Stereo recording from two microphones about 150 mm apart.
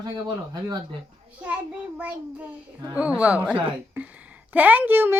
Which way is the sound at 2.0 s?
10° right (ahead or behind).